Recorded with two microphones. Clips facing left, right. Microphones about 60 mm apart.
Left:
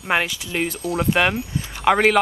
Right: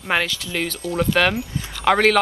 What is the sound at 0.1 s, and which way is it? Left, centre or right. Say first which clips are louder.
Speech: even; centre.